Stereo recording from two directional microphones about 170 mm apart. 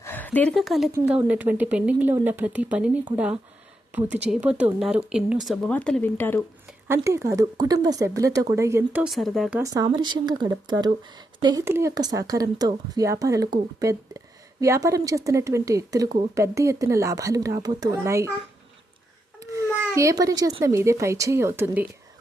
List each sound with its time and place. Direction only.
0.0 s speech: 10° left (ahead or behind); by 3.0 s 5° right (ahead or behind)
4.3 s speech: 5° right (ahead or behind); by 6.4 s 10° left (ahead or behind)
6.8 s speech: 15° right (ahead or behind); by 9.6 s centre (ahead or behind)
9.6 s speech: 20° right (ahead or behind)
19.4 s a child's voice: 20° right (ahead or behind)